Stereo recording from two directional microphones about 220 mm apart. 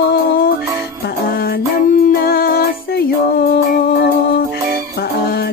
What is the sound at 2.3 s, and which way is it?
Music, 45° left (ahead or behind).